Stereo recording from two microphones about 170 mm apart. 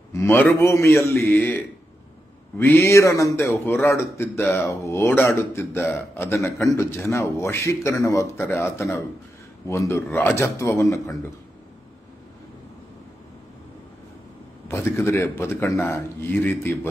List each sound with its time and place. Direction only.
0.1 s a man's voice: 15° left (ahead or behind)
14.7 s a man's voice: 15° left (ahead or behind)